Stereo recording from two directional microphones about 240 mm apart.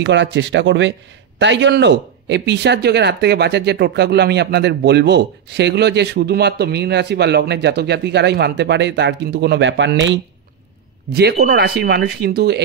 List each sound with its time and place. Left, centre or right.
0.0 s speech: right